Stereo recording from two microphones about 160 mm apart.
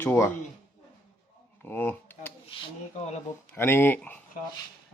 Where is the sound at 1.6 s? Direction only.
10° left (ahead or behind).